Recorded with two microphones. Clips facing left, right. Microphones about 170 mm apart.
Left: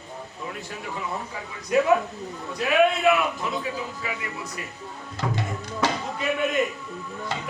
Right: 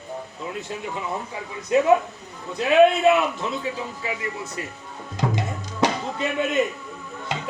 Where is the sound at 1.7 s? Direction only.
25° right (ahead or behind).